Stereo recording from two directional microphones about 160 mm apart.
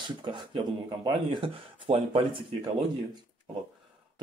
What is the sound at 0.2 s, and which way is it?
Speech, 30° right (ahead or behind).